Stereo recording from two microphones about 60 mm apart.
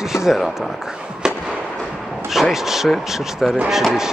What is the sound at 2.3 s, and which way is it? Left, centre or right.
Speech, centre.